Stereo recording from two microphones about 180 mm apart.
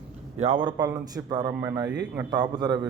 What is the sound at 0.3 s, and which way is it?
Speech, 30° right (ahead or behind).